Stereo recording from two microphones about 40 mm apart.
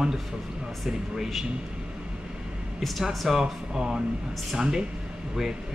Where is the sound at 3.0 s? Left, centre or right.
Centre.